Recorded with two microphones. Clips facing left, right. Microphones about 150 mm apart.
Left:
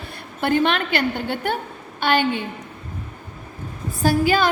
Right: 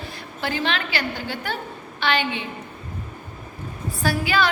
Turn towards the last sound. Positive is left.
turn(degrees=45)  # may be behind; listen again after turning